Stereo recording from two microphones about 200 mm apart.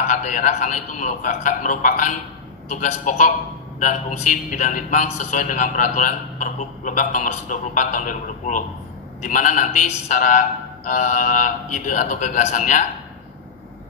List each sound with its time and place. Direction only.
0.0 s a man's voice: 40° left (ahead or behind)